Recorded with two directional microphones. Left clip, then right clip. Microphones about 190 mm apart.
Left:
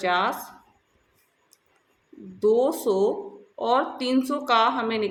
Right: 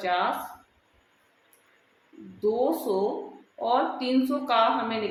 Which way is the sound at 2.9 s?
50° left (ahead or behind).